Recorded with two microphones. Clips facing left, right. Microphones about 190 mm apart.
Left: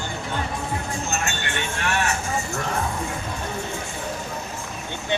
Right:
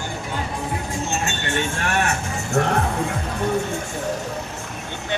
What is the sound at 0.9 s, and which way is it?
Vehicle, 25° right (ahead or behind).